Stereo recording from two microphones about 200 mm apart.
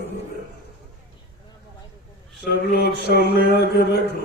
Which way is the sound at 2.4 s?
55° left (ahead or behind).